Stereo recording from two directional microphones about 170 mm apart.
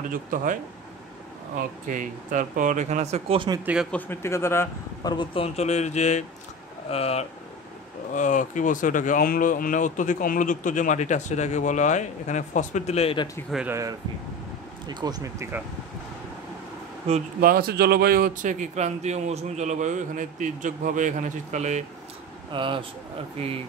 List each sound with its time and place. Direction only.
0.1 s a man's voice: 55° right (ahead or behind)
1.6 s a man's voice: 50° right (ahead or behind); by 3.6 s 25° right (ahead or behind)
3.9 s a man's voice: 15° left (ahead or behind)
5.1 s speech: 30° left (ahead or behind)
8.1 s speech: 50° left (ahead or behind); by 13.3 s 35° left (ahead or behind)
13.7 s speech: 20° right (ahead or behind)
17.4 s a man's voice: 60° right (ahead or behind); by 21.8 s 45° right (ahead or behind)
22.5 s speech: 30° right (ahead or behind)